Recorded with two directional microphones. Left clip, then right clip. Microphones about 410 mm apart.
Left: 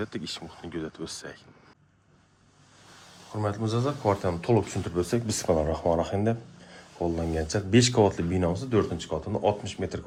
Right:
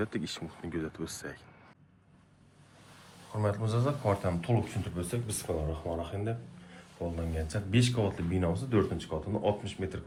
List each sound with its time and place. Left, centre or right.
0.0 s speech: centre
3.3 s speech: centre